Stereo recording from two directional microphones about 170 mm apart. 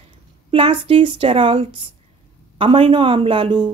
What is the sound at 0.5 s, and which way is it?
A woman's voice, 30° right (ahead or behind).